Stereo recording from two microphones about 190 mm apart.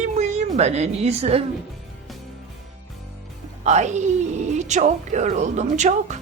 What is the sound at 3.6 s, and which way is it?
A woman's voice, 40° right (ahead or behind).